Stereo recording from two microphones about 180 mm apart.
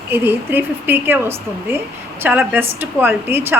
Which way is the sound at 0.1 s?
10° right (ahead or behind).